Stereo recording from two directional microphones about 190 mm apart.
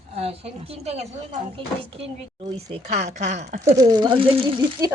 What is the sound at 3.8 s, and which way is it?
Speech, 20° right (ahead or behind).